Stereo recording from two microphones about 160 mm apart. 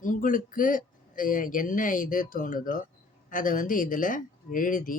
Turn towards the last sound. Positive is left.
turn(degrees=60)  # may be behind; listen again after turning